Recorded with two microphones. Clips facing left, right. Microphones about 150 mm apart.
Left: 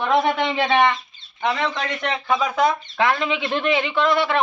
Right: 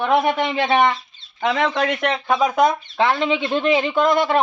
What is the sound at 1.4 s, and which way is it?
Speech, 85° right.